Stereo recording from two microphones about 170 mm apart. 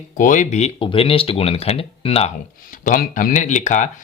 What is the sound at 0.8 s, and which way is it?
Speech, 35° left (ahead or behind).